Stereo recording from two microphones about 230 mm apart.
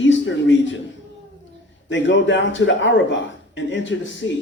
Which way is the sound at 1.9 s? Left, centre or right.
Left.